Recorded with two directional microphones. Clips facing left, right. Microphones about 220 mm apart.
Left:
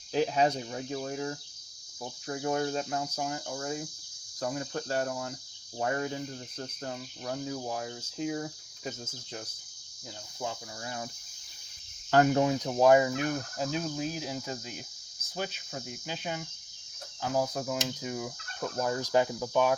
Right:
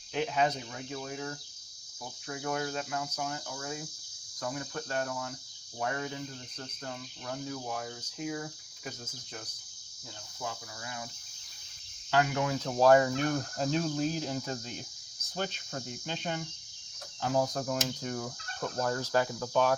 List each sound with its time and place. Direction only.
0.1 s speech: 35° left (ahead or behind)
2.2 s speech: 30° left (ahead or behind)
10.8 s speech: 40° left (ahead or behind)
12.1 s speech: 35° left (ahead or behind)
12.5 s cricket: 15° left (ahead or behind)